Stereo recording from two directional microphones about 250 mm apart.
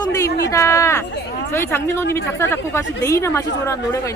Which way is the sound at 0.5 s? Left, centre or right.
Centre.